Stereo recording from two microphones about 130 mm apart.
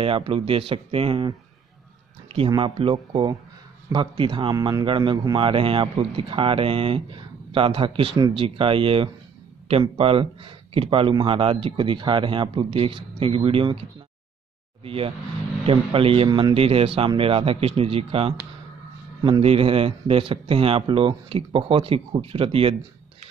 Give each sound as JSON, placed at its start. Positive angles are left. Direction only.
{"t": 0.0, "sound": "a man's voice", "side_deg": -45}
{"t": 14.8, "sound": "speech", "side_deg": -45}
{"t": 16.3, "sound": "a man's voice", "side_deg": -30}
{"t": 16.5, "sound": "speech", "side_deg": -45}